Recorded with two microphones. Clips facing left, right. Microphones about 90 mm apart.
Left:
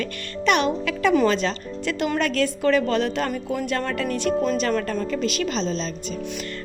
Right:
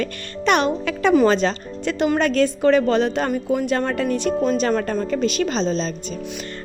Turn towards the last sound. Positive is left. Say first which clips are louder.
# right 4 dB
turn(degrees=-30)  # may be behind; listen again after turning